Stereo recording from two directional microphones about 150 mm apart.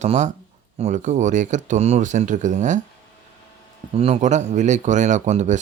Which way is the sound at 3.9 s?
45° right (ahead or behind).